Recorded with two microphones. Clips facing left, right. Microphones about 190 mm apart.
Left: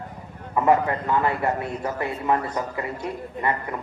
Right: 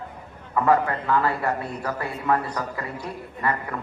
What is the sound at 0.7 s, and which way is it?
A man's voice, 20° left (ahead or behind).